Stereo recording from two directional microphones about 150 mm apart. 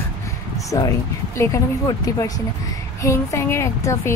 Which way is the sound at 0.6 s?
20° left (ahead or behind).